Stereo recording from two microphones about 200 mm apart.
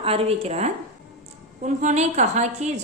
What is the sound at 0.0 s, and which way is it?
Female singing, 30° right (ahead or behind).